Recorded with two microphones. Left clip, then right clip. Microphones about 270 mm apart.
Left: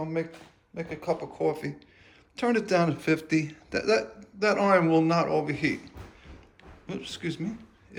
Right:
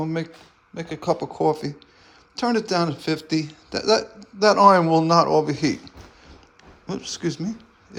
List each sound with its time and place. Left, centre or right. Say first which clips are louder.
0.0 s a man's voice: right 4 dB; right; by 7.5 s centre